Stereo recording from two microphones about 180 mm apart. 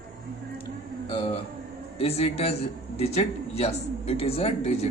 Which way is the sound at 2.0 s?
35° left (ahead or behind).